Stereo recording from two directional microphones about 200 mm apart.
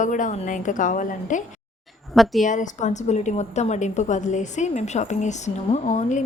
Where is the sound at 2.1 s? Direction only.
Centre (ahead or behind).